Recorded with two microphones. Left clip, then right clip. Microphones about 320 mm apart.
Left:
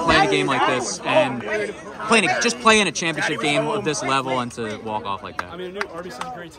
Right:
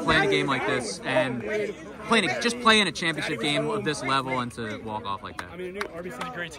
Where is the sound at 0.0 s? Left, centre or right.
Left.